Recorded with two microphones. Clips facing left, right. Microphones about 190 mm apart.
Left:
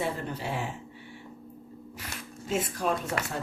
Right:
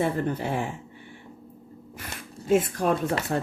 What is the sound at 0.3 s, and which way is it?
Speech, 55° right (ahead or behind).